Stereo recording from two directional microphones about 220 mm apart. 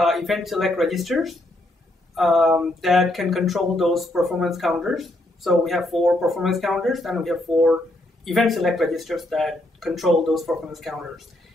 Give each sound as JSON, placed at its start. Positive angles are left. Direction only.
{"t": 0.0, "sound": "speech", "side_deg": 0}